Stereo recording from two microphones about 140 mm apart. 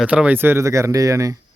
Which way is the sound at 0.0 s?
10° right (ahead or behind).